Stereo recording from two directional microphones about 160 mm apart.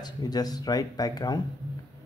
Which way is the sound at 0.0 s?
25° left (ahead or behind).